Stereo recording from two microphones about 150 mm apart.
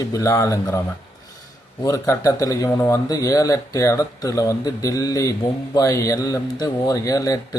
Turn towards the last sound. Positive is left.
turn(degrees=25)  # may be behind; listen again after turning